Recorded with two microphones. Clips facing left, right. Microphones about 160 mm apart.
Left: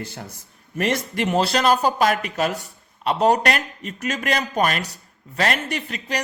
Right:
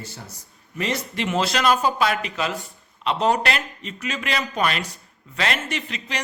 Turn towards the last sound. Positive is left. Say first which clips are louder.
# left 3 dB
turn(degrees=45)  # may be behind; listen again after turning